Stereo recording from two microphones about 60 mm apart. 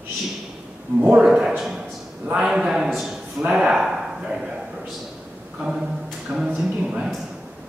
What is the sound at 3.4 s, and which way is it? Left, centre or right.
Speech, centre.